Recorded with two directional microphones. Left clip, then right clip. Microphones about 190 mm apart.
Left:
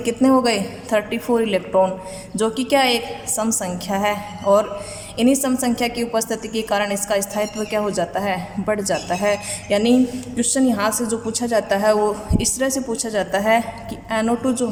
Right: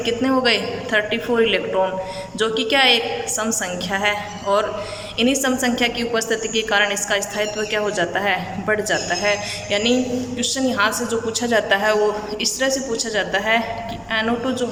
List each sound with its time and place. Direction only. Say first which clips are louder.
0.0 s a woman's voice: left 2 dB; 30° left (ahead or behind)